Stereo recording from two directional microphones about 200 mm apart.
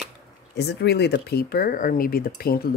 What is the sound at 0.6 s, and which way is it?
Speech, 55° left (ahead or behind).